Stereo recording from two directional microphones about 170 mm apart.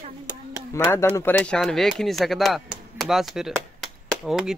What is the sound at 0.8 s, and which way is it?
A woman's voice, 15° left (ahead or behind).